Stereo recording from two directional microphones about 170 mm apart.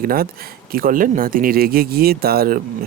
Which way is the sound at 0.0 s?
60° right (ahead or behind).